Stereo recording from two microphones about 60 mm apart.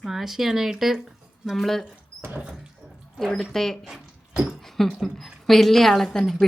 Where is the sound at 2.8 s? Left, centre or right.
Centre.